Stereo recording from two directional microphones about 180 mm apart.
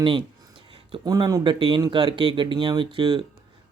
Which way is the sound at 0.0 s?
25° right (ahead or behind).